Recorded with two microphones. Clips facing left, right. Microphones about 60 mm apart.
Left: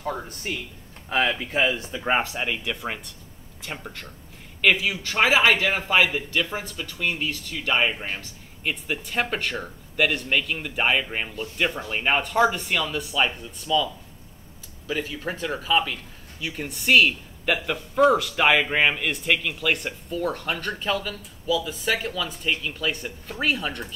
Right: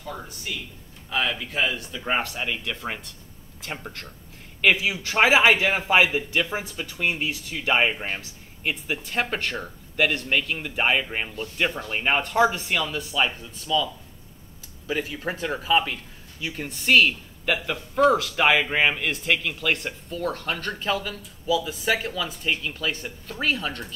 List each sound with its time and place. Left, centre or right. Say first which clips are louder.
0.0 s speech: left 5 dB; left
1.3 s a man's voice: left 3 dB; left; by 13.8 s centre
14.9 s speech: right 1 dB; centre